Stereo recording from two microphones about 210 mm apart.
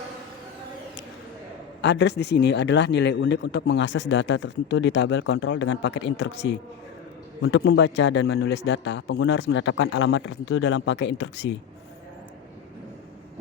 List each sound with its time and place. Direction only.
1.8 s a man's voice: 55° left (ahead or behind)